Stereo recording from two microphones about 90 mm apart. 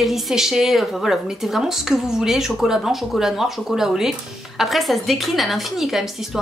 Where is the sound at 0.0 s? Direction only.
Centre (ahead or behind).